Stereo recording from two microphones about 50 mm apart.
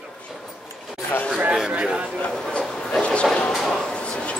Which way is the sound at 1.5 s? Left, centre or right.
Centre.